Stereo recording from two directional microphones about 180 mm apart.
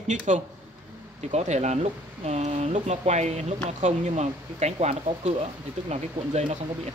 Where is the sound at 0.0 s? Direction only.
40° right (ahead or behind).